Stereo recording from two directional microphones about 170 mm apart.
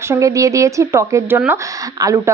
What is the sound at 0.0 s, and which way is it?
A woman's voice, 15° right (ahead or behind).